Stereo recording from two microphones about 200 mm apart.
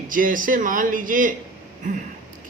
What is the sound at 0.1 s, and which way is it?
A man's voice, 45° right (ahead or behind).